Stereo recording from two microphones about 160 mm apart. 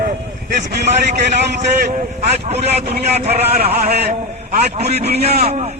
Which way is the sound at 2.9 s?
75° right (ahead or behind).